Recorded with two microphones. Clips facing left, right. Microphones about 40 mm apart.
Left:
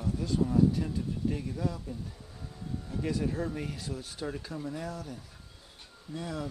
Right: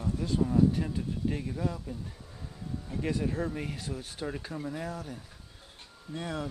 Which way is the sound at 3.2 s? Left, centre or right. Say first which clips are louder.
Right 1 dB; centre.